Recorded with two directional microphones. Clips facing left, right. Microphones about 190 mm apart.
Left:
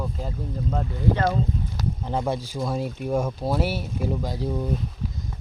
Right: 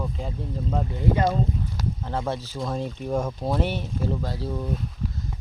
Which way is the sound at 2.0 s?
15° left (ahead or behind).